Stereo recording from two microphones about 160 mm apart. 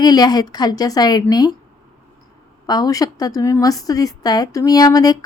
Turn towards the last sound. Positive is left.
turn(degrees=25)  # may be behind; listen again after turning